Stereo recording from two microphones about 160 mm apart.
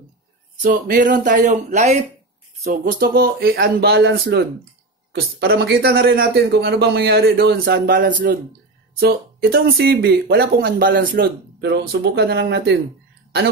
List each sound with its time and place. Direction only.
0.6 s speech: 55° right (ahead or behind)
2.6 s speech: 65° right (ahead or behind)
9.0 s speech: 75° right (ahead or behind)